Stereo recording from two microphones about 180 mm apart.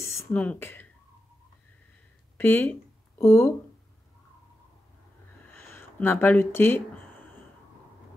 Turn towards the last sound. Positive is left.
turn(degrees=15)  # may be behind; listen again after turning